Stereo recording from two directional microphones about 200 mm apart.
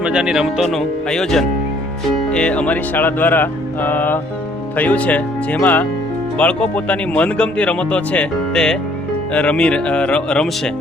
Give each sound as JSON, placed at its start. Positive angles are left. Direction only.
{"t": 0.0, "sound": "speech", "side_deg": -5}
{"t": 2.3, "sound": "music", "side_deg": 5}
{"t": 6.3, "sound": "speech", "side_deg": 5}